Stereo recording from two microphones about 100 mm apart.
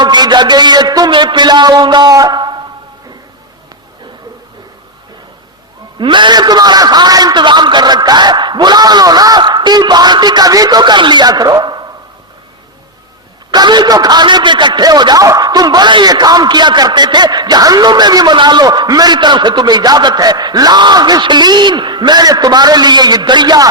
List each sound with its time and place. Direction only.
0.0 s a man's voice: 45° right (ahead or behind)
6.0 s a man's voice: 50° right (ahead or behind)
13.5 s a man's voice: 45° right (ahead or behind)